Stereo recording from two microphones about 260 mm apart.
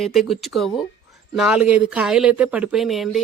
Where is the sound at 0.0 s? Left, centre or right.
Centre.